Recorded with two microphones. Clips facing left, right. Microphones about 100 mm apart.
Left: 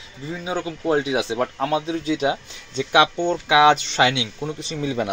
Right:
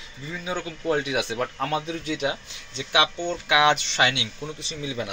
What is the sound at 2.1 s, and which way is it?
Speech, 30° left (ahead or behind).